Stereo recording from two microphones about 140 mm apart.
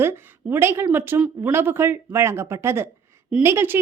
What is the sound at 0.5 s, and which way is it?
A woman's voice, 15° right (ahead or behind).